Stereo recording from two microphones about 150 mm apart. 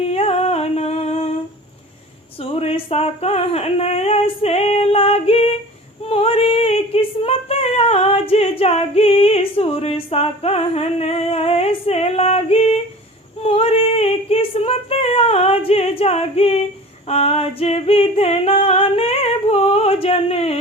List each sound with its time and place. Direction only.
0.0 s humming: 45° left (ahead or behind)
2.4 s a sound: 40° left (ahead or behind)
6.0 s female singing: 40° left (ahead or behind)